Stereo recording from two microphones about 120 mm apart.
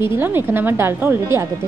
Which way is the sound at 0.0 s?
20° right (ahead or behind).